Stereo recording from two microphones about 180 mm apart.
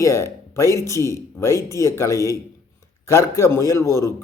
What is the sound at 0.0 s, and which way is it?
Speech, 15° left (ahead or behind).